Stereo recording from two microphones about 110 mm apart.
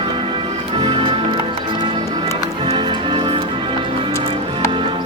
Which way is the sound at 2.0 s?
35° right (ahead or behind).